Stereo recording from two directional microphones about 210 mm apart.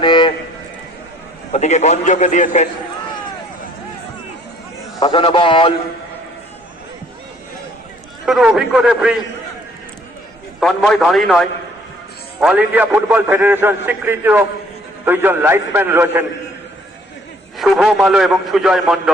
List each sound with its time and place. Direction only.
0.0 s vehicle: 20° left (ahead or behind)
1.5 s a man's voice: 30° left (ahead or behind)
4.9 s a man's voice: 25° left (ahead or behind)
8.2 s a man's voice: centre (ahead or behind)
10.6 s a man's voice: centre (ahead or behind)
17.6 s a man's voice: centre (ahead or behind)